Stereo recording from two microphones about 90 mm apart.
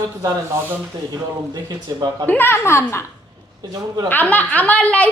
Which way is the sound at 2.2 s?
20° left (ahead or behind).